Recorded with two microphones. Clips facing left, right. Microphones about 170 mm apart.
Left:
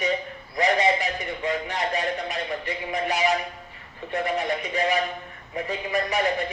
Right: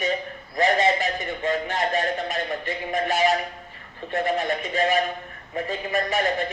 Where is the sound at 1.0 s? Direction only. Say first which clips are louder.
Right 2 dB; 45° right (ahead or behind).